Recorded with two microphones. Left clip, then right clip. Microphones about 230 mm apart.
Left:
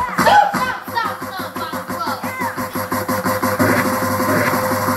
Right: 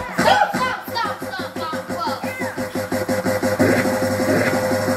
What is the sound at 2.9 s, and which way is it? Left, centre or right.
Music, centre.